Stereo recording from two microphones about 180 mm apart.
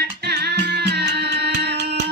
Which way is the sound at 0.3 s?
65° right (ahead or behind).